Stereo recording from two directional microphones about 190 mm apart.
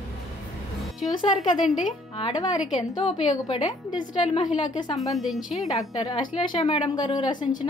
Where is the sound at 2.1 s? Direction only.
25° left (ahead or behind).